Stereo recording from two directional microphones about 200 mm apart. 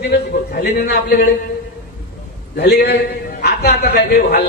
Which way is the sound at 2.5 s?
55° left (ahead or behind).